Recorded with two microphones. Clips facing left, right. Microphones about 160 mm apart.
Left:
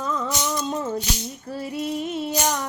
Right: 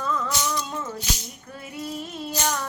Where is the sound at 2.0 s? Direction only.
20° left (ahead or behind).